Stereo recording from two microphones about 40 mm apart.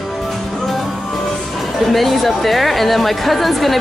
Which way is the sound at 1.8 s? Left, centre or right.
Centre.